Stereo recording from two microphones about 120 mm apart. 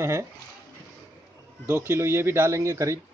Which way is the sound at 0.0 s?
25° right (ahead or behind).